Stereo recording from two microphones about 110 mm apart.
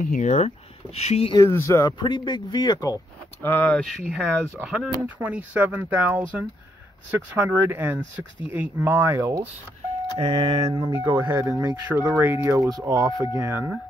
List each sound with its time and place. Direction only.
0.2 s speech: 90° left
0.9 s speech: 70° left (ahead or behind)
1.4 s speech: 25° left (ahead or behind)
2.0 s speech: 45° left (ahead or behind)
3.4 s speech: 15° left (ahead or behind)
3.8 s speech: centre (ahead or behind); by 9.4 s 25° right (ahead or behind)
10.1 s speech: 50° right (ahead or behind)
10.9 s speech: 25° right (ahead or behind)